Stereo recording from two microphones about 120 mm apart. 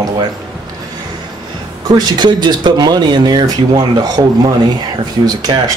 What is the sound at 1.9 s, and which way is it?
Speech, 35° right (ahead or behind).